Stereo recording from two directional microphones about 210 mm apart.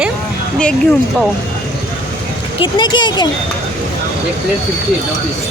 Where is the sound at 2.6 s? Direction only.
20° left (ahead or behind).